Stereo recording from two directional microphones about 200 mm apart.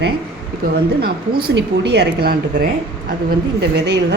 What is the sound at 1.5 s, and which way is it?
Speech, 55° right (ahead or behind).